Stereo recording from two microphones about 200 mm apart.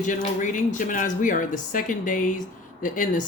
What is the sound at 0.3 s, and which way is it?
Speech, 40° left (ahead or behind).